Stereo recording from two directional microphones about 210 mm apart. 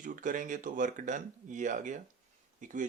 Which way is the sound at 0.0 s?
40° right (ahead or behind).